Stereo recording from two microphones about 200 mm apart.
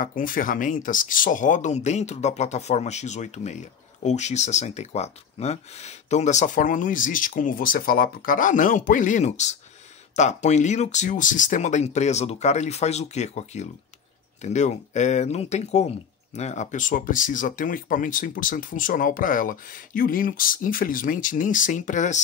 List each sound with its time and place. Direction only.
0.0 s speech: 45° left (ahead or behind)